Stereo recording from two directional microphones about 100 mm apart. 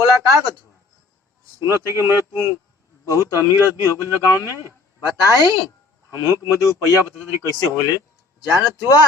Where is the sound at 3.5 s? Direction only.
25° right (ahead or behind).